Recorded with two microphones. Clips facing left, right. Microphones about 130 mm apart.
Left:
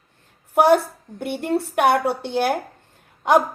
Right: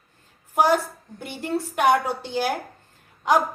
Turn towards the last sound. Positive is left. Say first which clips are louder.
# left 4 dB
turn(degrees=55)  # may be behind; listen again after turning